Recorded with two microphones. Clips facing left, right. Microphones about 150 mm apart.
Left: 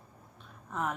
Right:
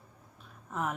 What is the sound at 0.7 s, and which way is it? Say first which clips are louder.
Speech: even; centre (ahead or behind).